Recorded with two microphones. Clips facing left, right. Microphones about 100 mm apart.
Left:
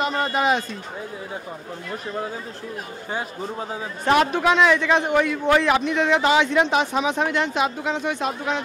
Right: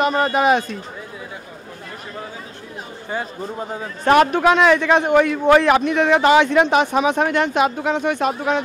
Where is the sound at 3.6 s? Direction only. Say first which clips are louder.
Right 3 dB; 5° left (ahead or behind).